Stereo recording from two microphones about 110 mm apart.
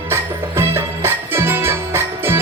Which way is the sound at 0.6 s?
20° right (ahead or behind).